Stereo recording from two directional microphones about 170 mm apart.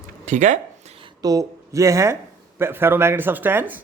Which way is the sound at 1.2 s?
20° right (ahead or behind).